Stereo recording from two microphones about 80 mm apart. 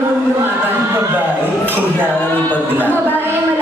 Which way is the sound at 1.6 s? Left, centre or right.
Right.